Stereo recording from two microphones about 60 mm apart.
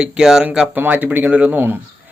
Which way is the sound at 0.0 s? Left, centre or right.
Centre.